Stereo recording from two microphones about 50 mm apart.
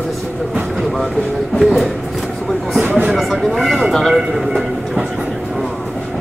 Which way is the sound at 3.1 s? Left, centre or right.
Centre.